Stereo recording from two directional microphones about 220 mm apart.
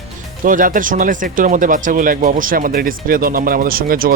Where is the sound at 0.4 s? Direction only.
40° right (ahead or behind).